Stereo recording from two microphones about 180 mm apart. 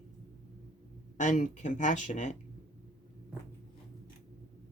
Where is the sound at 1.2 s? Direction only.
45° left (ahead or behind).